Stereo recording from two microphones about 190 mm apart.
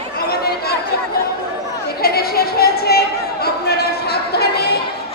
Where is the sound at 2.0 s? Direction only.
55° left (ahead or behind).